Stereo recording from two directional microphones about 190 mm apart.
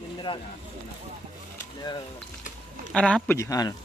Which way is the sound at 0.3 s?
30° left (ahead or behind).